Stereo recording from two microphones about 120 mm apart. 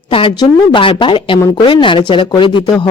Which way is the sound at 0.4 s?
45° left (ahead or behind).